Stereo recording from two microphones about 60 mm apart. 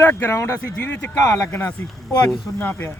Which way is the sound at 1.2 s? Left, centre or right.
Left.